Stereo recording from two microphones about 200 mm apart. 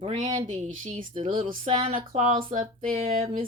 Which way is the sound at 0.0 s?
30° right (ahead or behind).